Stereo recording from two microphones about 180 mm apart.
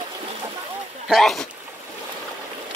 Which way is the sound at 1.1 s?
Centre (ahead or behind).